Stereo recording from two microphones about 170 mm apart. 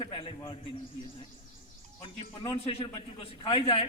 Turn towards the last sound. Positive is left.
turn(degrees=35)  # may be behind; listen again after turning